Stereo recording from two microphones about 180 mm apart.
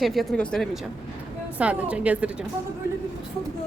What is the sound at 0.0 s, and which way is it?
Speech, centre (ahead or behind).